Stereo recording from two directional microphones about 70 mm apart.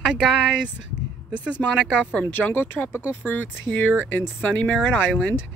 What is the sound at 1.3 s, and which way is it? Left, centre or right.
Speech, centre.